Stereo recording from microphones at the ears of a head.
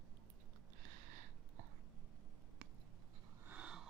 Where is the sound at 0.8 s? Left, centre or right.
Right.